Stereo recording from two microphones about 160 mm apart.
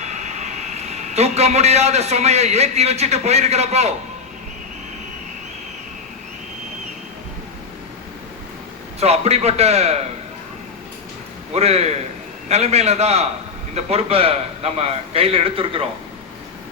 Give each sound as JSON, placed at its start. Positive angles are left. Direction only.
{"t": 0.0, "sound": "a man's voice", "side_deg": -45}
{"t": 9.0, "sound": "a man's voice", "side_deg": -40}
{"t": 11.5, "sound": "a man's voice", "side_deg": -40}